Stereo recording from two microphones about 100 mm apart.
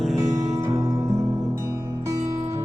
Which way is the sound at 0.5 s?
30° right (ahead or behind).